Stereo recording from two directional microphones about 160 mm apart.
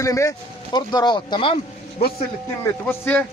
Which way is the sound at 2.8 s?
10° left (ahead or behind).